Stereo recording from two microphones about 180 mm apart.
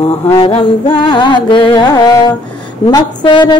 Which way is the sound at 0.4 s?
30° left (ahead or behind).